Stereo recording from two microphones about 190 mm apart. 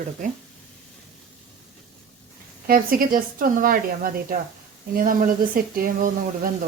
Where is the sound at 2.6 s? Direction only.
50° right (ahead or behind).